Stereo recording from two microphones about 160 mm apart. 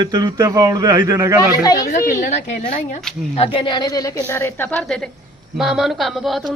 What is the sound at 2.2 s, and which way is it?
Speech, 45° left (ahead or behind).